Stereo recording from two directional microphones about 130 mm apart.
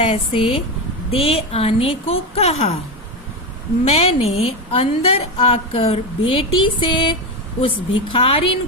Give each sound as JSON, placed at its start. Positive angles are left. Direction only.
{"t": 0.0, "sound": "a woman's voice", "side_deg": 45}
{"t": 3.8, "sound": "a woman's voice", "side_deg": 50}